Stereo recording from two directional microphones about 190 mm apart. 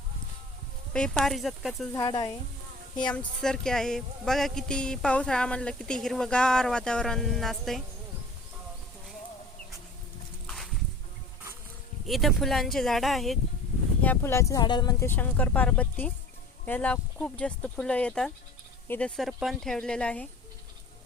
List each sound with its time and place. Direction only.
0.9 s speech: 5° left (ahead or behind)
1.9 s speech: 20° left (ahead or behind)
3.0 s speech: 5° left (ahead or behind)
10.4 s a sound: centre (ahead or behind)
12.0 s speech: centre (ahead or behind)